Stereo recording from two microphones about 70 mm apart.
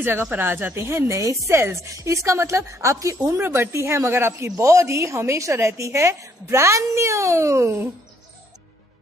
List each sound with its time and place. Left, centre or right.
0.0 s a woman's voice: right
3.3 s speech: right
4.6 s a woman's voice: right